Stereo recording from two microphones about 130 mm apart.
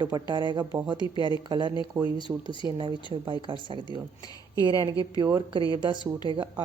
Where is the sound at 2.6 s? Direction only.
40° right (ahead or behind).